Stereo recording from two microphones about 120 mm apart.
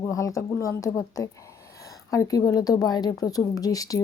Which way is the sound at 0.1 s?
25° left (ahead or behind).